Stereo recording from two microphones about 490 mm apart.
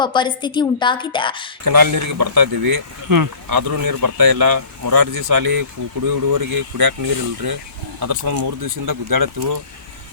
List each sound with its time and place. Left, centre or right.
0.0 s a woman's voice: centre
1.6 s speech: right